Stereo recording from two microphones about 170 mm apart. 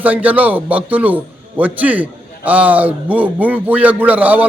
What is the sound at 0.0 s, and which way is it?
A man's voice, 10° right (ahead or behind).